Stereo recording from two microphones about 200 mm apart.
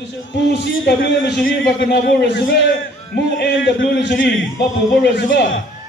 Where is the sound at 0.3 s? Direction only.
55° left (ahead or behind).